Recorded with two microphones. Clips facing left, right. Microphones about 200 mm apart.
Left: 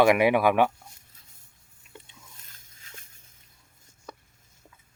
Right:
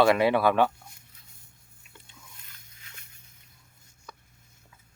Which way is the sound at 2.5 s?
45° left (ahead or behind).